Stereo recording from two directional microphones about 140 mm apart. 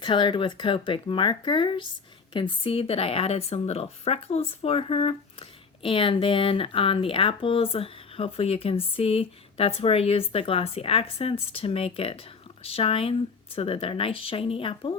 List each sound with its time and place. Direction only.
0.0 s speech: 35° left (ahead or behind)